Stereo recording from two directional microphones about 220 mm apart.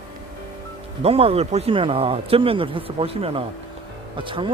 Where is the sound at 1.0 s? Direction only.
25° right (ahead or behind).